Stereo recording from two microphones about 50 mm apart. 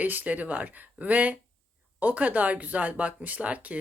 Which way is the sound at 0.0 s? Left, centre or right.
Right.